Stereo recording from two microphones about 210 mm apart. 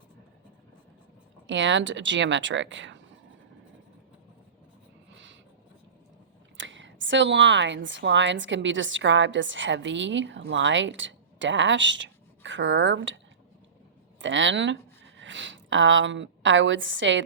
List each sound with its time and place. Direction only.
1.5 s a woman's voice: 60° right (ahead or behind)
5.1 s a sound: 60° right (ahead or behind)
6.6 s a woman's voice: 60° right (ahead or behind)
14.2 s a woman's voice: 60° right (ahead or behind)